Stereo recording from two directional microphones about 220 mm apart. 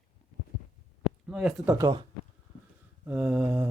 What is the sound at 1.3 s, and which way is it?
Speech, centre (ahead or behind).